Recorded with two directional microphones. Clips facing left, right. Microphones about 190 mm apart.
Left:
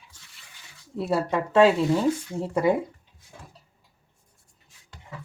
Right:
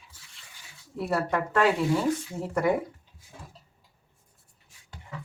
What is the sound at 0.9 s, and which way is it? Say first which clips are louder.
Speech: left 2 dB; 25° left (ahead or behind).